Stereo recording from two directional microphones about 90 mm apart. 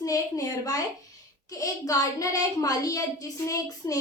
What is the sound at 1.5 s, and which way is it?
A child's voice, 40° left (ahead or behind).